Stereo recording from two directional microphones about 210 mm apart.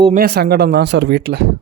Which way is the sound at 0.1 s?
50° right (ahead or behind).